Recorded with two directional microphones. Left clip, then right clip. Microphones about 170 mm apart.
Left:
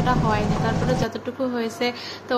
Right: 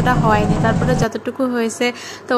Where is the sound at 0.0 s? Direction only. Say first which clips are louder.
Right 6 dB; 35° right (ahead or behind).